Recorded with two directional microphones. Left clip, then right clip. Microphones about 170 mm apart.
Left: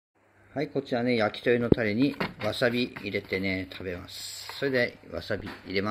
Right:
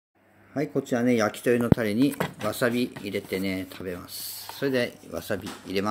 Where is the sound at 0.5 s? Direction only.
15° right (ahead or behind).